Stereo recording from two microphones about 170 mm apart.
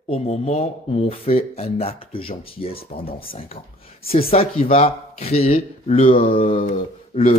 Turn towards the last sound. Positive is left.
turn(degrees=40)  # may be behind; listen again after turning